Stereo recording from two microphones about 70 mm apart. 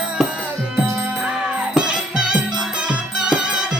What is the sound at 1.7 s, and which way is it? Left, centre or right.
Music, centre.